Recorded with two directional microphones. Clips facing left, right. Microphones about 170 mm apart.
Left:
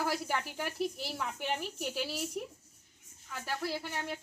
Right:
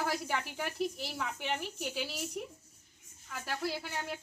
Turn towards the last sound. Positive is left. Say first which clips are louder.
# left 1 dB
turn(degrees=0)  # may be behind; listen again after turning